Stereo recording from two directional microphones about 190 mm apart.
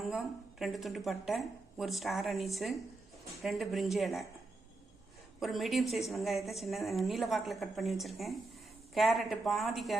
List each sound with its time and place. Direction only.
0.0 s a woman's voice: centre (ahead or behind)
5.4 s a woman's voice: centre (ahead or behind)